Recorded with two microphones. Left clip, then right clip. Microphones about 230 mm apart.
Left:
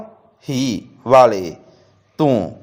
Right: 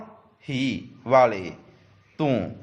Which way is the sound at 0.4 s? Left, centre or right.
Left.